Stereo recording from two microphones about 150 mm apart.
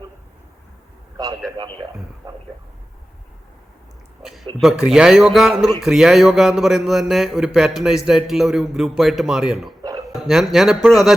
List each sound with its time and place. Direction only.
1.1 s a man's voice: 25° right (ahead or behind)
2.2 s a sound: 30° right (ahead or behind)
4.6 s speech: 5° right (ahead or behind)